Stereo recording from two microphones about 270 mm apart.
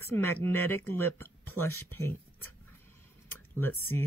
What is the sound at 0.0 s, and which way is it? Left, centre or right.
Speech, centre.